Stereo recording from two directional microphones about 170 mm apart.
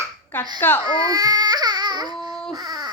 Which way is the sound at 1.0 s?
20° right (ahead or behind).